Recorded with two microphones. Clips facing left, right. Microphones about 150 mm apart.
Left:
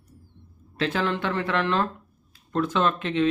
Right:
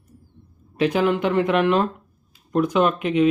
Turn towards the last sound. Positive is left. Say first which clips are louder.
# right 5 dB
turn(degrees=-15)  # may be behind; listen again after turning